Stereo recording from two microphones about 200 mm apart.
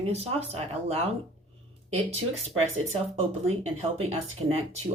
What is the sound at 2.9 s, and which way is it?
Speech, 30° right (ahead or behind).